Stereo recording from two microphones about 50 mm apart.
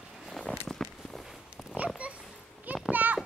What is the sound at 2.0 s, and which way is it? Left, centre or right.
Children playing, right.